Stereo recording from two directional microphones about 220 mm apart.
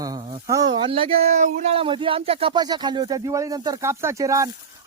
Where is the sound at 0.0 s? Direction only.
15° right (ahead or behind).